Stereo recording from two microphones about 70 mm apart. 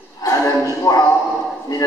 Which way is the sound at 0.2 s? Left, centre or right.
Left.